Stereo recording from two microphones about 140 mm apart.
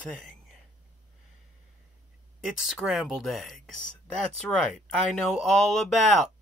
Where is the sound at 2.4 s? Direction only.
5° right (ahead or behind).